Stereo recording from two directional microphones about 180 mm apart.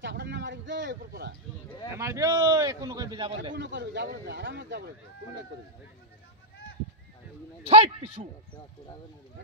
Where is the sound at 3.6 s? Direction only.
75° right (ahead or behind).